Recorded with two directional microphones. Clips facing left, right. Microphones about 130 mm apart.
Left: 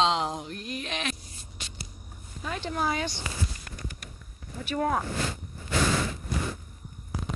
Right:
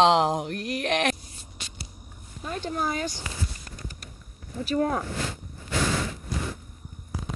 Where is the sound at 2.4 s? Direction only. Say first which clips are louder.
Right 1 dB; 45° right (ahead or behind).